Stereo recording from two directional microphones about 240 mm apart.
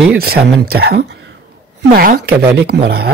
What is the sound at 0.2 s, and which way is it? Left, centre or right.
Speech, right.